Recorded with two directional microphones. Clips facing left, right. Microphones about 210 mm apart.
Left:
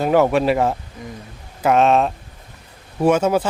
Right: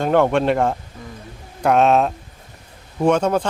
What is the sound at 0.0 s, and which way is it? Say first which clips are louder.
Speech: left 1 dB; 5° left (ahead or behind).